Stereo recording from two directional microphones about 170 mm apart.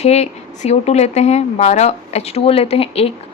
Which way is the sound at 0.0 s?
40° left (ahead or behind).